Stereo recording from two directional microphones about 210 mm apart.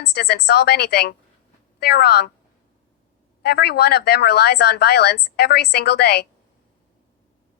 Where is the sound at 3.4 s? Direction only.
50° left (ahead or behind).